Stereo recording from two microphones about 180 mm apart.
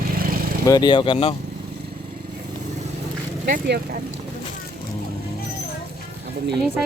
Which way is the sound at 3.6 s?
60° right (ahead or behind).